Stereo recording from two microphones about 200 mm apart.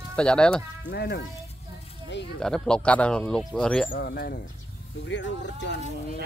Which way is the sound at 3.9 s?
50° left (ahead or behind).